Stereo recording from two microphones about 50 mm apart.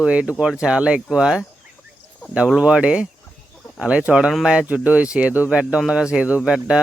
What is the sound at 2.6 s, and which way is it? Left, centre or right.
Speech, right.